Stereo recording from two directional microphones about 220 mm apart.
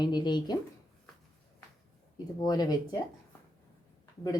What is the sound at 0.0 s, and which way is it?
Speech, 20° left (ahead or behind).